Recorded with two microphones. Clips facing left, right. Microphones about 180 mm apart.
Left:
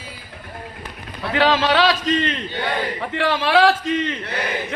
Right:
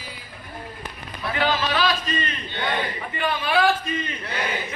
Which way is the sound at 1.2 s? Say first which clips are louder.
Left 5 dB; 90° left.